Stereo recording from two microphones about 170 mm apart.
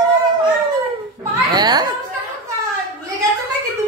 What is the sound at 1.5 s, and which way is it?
Speech, 25° right (ahead or behind).